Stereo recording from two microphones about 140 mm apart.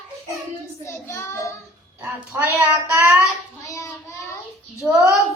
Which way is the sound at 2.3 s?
15° right (ahead or behind).